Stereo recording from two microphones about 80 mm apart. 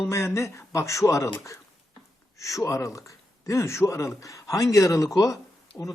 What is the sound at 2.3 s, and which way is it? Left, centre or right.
Speech, left.